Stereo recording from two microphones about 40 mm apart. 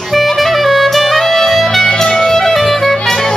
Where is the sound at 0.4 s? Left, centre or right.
Centre.